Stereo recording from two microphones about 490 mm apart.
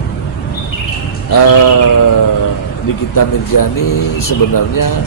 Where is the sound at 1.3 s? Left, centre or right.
Left.